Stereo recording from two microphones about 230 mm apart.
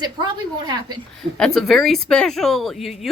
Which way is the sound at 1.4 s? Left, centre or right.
Centre.